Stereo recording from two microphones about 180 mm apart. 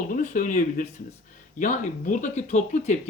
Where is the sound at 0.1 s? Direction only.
45° left (ahead or behind).